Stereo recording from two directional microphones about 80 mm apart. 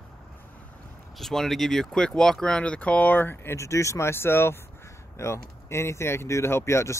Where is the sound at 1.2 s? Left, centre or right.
Centre.